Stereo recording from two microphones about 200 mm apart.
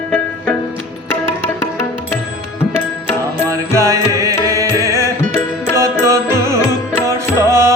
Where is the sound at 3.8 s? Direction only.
15° right (ahead or behind).